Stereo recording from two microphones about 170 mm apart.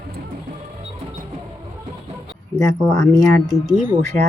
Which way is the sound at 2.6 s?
20° left (ahead or behind).